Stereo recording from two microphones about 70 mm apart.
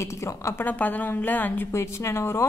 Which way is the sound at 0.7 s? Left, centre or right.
Left.